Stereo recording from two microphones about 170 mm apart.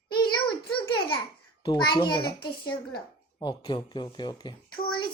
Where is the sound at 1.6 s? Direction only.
25° left (ahead or behind).